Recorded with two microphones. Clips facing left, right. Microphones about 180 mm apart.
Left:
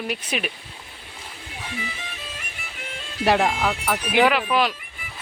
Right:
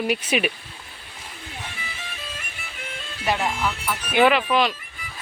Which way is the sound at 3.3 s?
70° left (ahead or behind).